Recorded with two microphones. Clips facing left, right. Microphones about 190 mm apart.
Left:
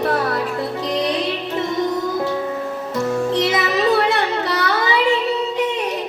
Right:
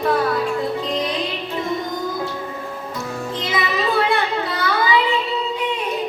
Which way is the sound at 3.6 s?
75° left (ahead or behind).